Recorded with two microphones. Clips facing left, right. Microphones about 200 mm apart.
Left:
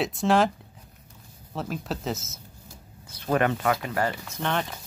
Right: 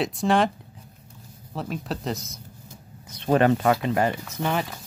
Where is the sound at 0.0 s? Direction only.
Centre (ahead or behind).